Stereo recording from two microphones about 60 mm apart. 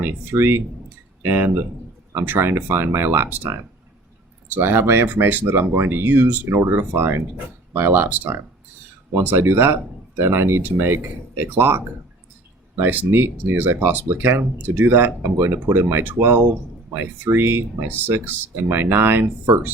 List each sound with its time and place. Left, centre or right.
0.0 s speech: right
9.1 s speech: right